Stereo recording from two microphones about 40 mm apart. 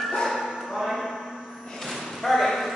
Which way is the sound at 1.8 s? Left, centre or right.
Centre.